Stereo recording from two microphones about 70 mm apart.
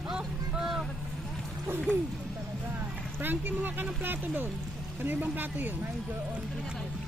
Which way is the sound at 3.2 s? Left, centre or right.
Right.